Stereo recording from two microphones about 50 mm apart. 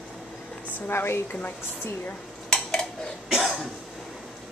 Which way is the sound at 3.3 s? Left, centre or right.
Centre.